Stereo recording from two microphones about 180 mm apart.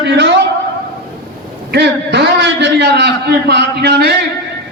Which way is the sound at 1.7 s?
70° right (ahead or behind).